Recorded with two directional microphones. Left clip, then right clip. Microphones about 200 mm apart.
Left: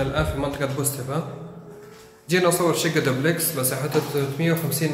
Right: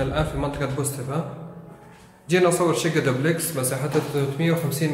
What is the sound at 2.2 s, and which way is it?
A man's voice, centre (ahead or behind).